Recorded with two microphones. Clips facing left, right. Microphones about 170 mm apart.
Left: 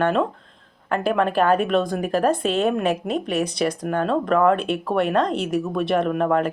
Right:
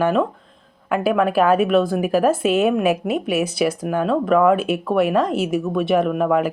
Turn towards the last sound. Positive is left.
turn(degrees=-5)  # may be behind; listen again after turning